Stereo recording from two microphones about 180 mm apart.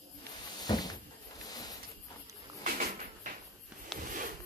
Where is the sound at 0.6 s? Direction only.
20° left (ahead or behind).